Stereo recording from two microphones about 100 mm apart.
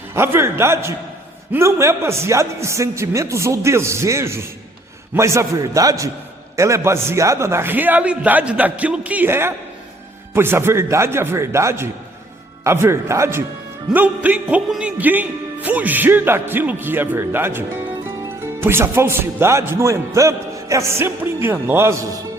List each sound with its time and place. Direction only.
0.1 s music: 25° right (ahead or behind)
5.1 s a man's voice: 30° right (ahead or behind)
6.6 s music: 30° right (ahead or behind)
13.9 s music: 15° right (ahead or behind)